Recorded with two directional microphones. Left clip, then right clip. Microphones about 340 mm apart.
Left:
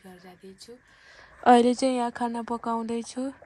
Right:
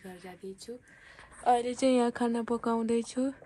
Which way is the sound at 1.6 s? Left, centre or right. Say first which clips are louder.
Left 2 dB; centre.